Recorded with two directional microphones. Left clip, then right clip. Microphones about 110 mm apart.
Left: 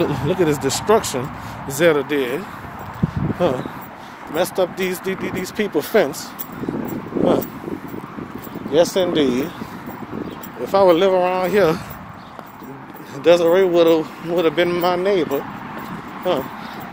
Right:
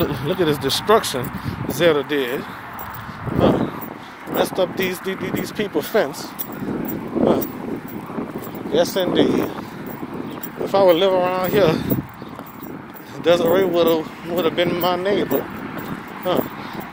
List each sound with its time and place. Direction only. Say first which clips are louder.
0.0 s speech: left 2 dB; 20° left (ahead or behind); by 1.2 s centre (ahead or behind)
1.7 s speech: left 1 dB; 30° left (ahead or behind)
2.1 s speech: left 1 dB; 15° left (ahead or behind)
3.3 s speech: right 3 dB; 40° left (ahead or behind)
5.8 s speech: left 2 dB; 90° left
8.7 s speech: left 2 dB; 75° left (ahead or behind)
10.6 s speech: left 1 dB; 50° left (ahead or behind)
11.6 s speech: even; 20° left (ahead or behind)
13.2 s speech: left 3 dB; 70° left (ahead or behind)